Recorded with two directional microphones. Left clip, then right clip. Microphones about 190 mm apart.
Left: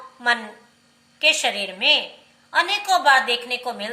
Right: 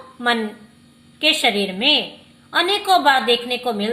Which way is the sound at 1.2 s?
45° right (ahead or behind).